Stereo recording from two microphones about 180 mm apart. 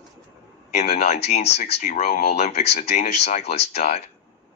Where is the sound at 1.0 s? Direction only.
35° left (ahead or behind).